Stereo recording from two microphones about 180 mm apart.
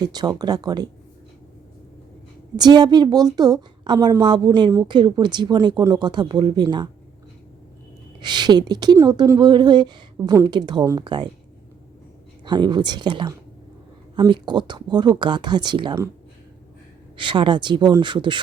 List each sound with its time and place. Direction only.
0.0 s a woman's voice: 20° right (ahead or behind)
2.6 s a woman's voice: 25° right (ahead or behind)
8.2 s a woman's voice: 25° right (ahead or behind)
12.5 s a woman's voice: 25° right (ahead or behind)
17.2 s a woman's voice: 25° right (ahead or behind)